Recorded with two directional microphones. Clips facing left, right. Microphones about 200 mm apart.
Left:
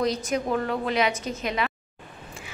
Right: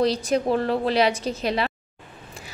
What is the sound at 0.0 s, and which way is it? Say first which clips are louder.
A woman's voice: right 4 dB; 30° right (ahead or behind).